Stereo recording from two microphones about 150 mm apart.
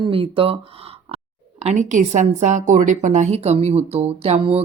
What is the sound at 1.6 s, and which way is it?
A woman's voice, 50° right (ahead or behind).